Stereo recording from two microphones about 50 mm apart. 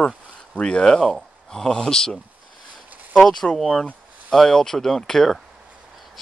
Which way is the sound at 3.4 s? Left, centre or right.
Centre.